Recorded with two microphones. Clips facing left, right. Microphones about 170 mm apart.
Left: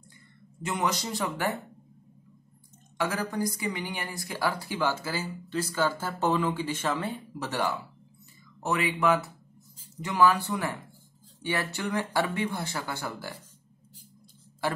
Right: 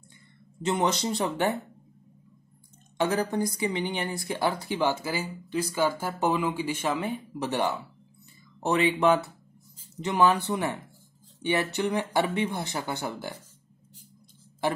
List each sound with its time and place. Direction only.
0.6 s speech: 25° right (ahead or behind)
3.0 s speech: 25° right (ahead or behind)